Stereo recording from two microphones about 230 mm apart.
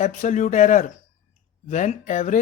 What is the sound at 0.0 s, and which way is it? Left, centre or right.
Speech, left.